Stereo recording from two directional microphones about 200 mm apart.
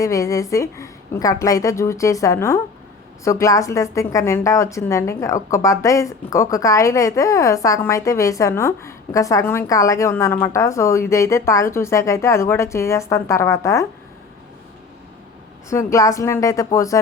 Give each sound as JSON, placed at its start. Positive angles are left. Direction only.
{"t": 0.0, "sound": "a woman's voice", "side_deg": 15}
{"t": 15.7, "sound": "a woman's voice", "side_deg": 15}